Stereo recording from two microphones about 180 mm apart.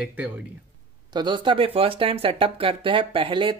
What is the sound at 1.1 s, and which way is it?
Speech, 25° right (ahead or behind).